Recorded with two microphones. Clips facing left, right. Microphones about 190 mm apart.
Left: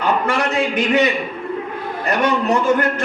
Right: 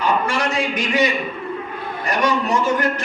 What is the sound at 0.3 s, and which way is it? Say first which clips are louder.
Speech: left 3 dB; 60° left (ahead or behind).